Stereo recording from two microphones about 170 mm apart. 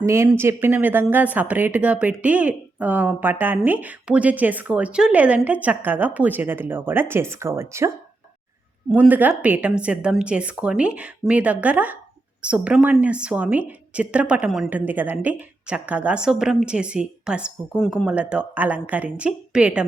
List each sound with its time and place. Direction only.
0.0 s a woman's voice: 15° right (ahead or behind)